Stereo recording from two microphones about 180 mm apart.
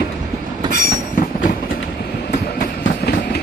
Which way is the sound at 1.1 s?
50° left (ahead or behind).